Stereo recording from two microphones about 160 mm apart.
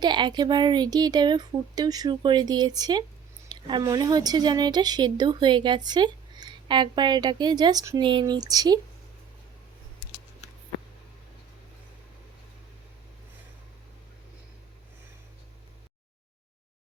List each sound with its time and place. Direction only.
0.0 s a woman's voice: 30° right (ahead or behind)